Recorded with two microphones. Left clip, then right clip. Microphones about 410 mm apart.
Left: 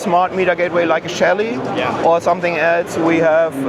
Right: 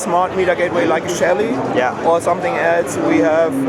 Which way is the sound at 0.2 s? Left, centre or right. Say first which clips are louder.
Right 2 dB; left.